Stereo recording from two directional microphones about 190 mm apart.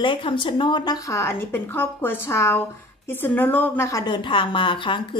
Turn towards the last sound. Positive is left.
turn(degrees=25)  # may be behind; listen again after turning